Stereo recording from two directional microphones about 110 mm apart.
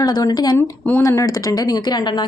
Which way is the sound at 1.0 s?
30° left (ahead or behind).